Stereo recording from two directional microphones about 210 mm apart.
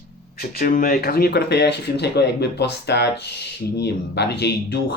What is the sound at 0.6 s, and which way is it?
Speech, 40° left (ahead or behind).